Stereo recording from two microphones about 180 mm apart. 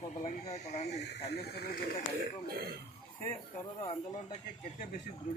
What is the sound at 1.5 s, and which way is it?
Speech, 55° left (ahead or behind).